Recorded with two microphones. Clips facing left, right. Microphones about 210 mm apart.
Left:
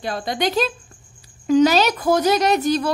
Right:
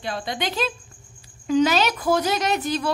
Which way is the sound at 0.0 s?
40° left (ahead or behind).